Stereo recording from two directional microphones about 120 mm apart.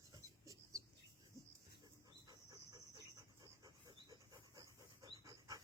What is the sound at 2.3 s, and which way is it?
Dog, 30° right (ahead or behind).